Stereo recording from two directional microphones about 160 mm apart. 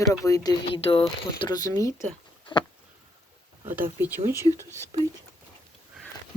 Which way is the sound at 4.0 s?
15° right (ahead or behind).